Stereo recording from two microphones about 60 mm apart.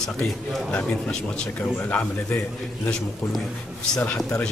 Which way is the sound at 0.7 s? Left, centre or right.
Left.